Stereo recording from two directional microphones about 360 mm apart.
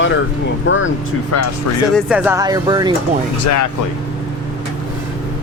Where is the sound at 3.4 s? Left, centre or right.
Left.